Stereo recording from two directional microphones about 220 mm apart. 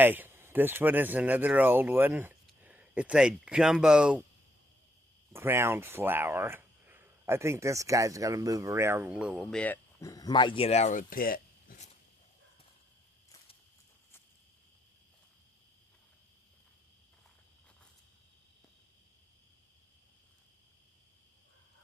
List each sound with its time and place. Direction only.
0.0 s speech: 10° right (ahead or behind)
5.3 s speech: 10° right (ahead or behind); by 11.9 s 40° left (ahead or behind)